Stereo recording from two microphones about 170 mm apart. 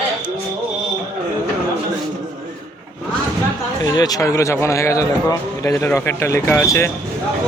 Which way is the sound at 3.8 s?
20° left (ahead or behind).